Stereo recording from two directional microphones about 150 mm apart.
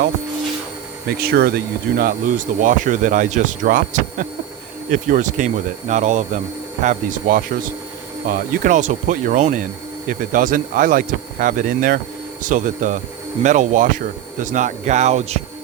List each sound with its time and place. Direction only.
1.0 s speech: 90° right; by 6.4 s 55° right (ahead or behind)
6.8 s speech: 65° right (ahead or behind)